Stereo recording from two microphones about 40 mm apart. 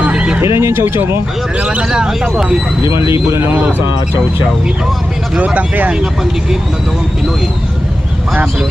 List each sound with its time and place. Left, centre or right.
0.5 s speech: right
1.6 s vehicle: right
1.9 s speech: centre
2.3 s speech: right
3.5 s speech: right
5.5 s speech: right